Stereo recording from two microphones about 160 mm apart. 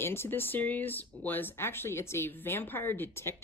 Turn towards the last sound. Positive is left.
turn(degrees=15)  # may be behind; listen again after turning